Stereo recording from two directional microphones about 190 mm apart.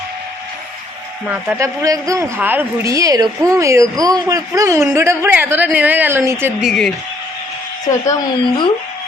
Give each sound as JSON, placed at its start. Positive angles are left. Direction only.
{"t": 1.3, "sound": "speech", "side_deg": -15}
{"t": 7.9, "sound": "speech", "side_deg": 15}